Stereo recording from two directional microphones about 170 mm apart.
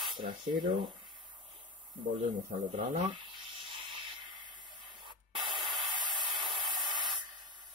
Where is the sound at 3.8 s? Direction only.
25° right (ahead or behind).